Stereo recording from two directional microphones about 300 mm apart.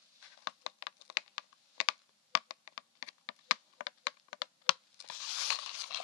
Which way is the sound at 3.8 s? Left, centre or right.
Left.